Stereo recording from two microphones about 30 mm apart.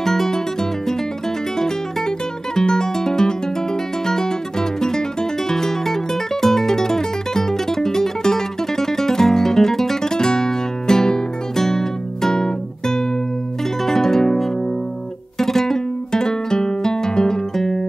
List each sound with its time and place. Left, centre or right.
0.0 s music: centre
10.1 s music: left